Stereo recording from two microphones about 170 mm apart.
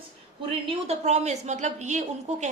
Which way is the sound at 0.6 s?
40° right (ahead or behind).